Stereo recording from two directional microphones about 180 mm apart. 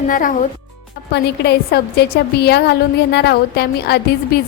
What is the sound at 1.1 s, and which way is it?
A woman's voice, 65° left (ahead or behind).